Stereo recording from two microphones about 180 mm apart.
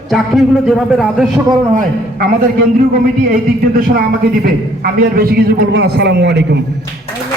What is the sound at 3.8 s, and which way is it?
A man's voice, 55° right (ahead or behind).